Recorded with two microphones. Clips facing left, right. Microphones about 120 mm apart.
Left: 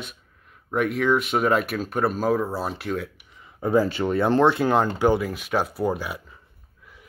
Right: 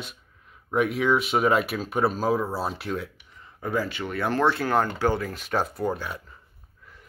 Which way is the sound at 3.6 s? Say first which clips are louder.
Left 7 dB; 30° left (ahead or behind).